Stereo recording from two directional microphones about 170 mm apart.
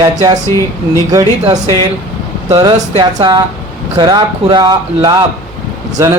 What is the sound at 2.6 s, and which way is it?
Speech, 25° right (ahead or behind).